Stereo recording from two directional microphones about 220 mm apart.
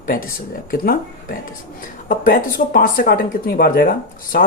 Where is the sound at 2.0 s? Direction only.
40° left (ahead or behind).